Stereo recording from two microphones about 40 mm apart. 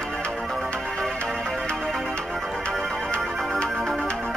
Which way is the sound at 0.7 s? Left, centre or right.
Centre.